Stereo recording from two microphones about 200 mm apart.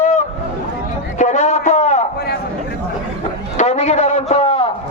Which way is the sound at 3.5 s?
35° left (ahead or behind).